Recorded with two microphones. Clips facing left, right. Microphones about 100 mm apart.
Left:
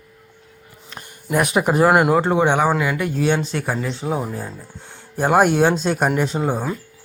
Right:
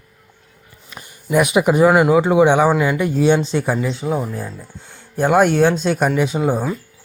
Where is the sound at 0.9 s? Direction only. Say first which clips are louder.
Right 3 dB; 5° right (ahead or behind); by 3.8 s 20° right (ahead or behind).